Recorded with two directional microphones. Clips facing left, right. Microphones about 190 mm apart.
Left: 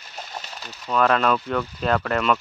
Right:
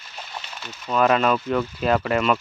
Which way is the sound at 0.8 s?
5° right (ahead or behind).